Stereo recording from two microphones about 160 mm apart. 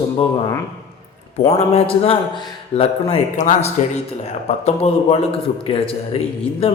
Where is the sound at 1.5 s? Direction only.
40° left (ahead or behind).